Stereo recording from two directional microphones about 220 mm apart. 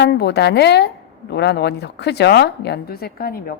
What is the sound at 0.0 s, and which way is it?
A woman's voice, 50° left (ahead or behind).